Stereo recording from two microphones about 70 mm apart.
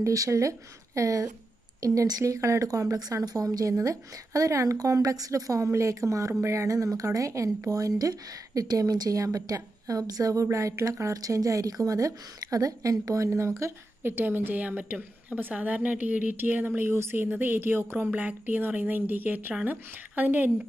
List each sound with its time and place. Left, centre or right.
0.0 s speech: right